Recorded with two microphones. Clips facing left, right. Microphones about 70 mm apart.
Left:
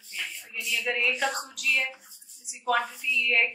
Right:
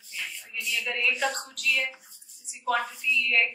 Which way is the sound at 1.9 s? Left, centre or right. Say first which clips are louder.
Right 1 dB; centre.